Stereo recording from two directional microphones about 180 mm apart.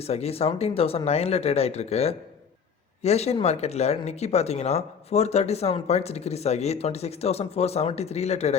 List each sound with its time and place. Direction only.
0.0 s speech: 35° left (ahead or behind)